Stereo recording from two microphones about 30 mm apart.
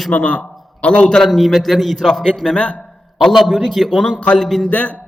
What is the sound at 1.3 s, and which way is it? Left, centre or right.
Speech, centre.